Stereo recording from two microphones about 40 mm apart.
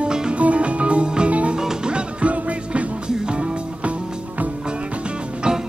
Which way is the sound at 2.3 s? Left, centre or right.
Right.